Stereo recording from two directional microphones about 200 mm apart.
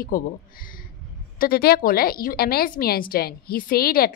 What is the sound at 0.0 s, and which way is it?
A woman's voice, 45° left (ahead or behind).